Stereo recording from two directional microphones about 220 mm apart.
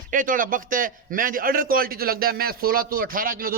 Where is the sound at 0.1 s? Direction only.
40° right (ahead or behind).